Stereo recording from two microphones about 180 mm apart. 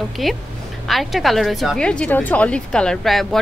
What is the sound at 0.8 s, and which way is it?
A woman's voice, centre (ahead or behind).